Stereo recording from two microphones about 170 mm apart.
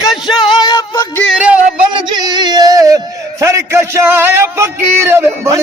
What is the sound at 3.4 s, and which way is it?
A man's voice, 15° right (ahead or behind).